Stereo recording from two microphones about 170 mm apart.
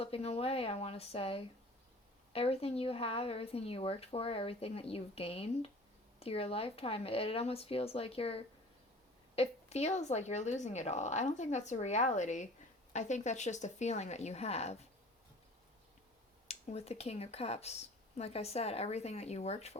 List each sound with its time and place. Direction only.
0.0 s speech: 35° left (ahead or behind)
16.5 s speech: 40° left (ahead or behind)